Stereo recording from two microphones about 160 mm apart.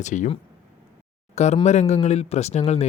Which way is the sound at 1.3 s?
45° left (ahead or behind).